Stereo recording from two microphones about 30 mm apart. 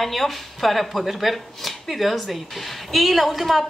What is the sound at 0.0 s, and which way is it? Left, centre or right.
Speech, centre.